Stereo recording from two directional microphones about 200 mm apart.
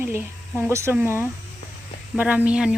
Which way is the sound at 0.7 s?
15° right (ahead or behind).